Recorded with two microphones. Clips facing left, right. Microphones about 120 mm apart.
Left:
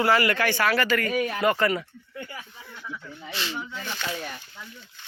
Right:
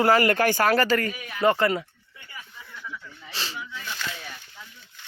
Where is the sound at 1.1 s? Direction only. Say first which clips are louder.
Left 14 dB; 65° left (ahead or behind).